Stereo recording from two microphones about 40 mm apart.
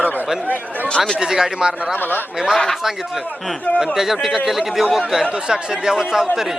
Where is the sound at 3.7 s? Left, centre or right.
Centre.